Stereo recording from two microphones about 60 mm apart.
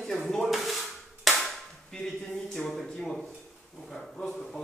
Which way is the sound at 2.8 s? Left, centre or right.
Centre.